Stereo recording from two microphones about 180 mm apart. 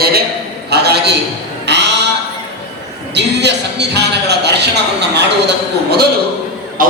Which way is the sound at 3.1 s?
70° right (ahead or behind).